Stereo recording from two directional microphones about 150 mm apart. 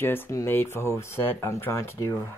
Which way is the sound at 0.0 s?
15° left (ahead or behind).